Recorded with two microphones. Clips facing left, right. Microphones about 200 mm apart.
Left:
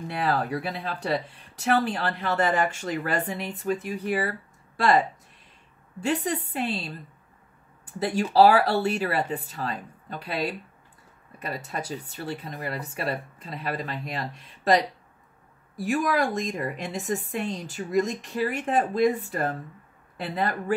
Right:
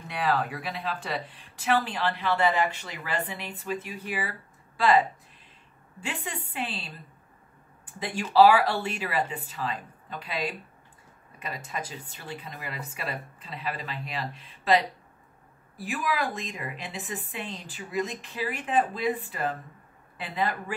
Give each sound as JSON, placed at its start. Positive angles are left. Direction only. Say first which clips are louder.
{"t": 0.2, "sound": "a woman's voice", "louder": "left 1 dB", "side_deg": 40}